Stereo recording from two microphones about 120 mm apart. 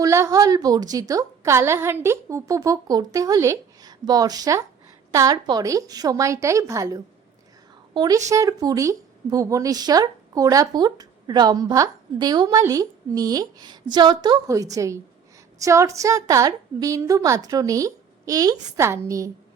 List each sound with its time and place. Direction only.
0.0 s a woman's voice: 25° right (ahead or behind)